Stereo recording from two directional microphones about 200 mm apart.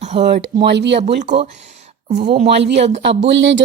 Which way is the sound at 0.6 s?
60° right (ahead or behind).